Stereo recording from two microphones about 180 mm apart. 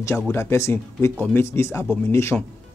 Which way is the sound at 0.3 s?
15° left (ahead or behind).